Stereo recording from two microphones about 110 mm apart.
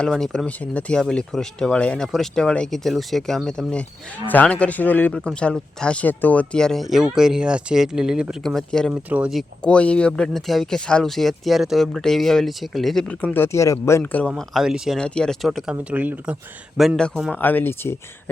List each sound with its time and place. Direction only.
0.0 s speech: 5° left (ahead or behind)
8.9 s speech: 15° right (ahead or behind)
9.6 s speech: 10° left (ahead or behind)
15.0 s speech: 5° left (ahead or behind)
15.7 s speech: 15° right (ahead or behind)
17.3 s speech: 15° left (ahead or behind)